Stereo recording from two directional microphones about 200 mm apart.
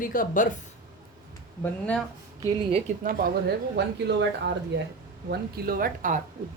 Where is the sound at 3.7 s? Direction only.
60° right (ahead or behind).